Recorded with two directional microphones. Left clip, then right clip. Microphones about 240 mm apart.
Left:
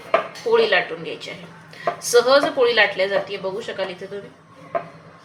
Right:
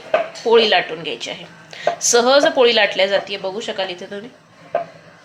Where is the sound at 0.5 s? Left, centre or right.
Right.